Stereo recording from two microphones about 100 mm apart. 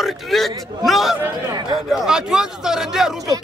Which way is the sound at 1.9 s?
5° right (ahead or behind).